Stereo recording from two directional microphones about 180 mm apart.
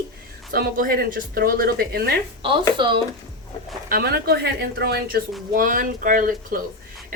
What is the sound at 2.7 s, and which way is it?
Speech, 25° right (ahead or behind).